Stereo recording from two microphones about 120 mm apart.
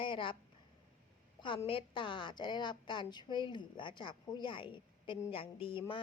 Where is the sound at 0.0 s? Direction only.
45° left (ahead or behind).